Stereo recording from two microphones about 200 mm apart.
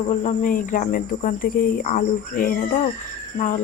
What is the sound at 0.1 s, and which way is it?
Speech, 40° left (ahead or behind).